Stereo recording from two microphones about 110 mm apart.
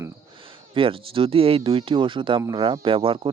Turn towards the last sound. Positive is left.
turn(degrees=-55)  # may be behind; listen again after turning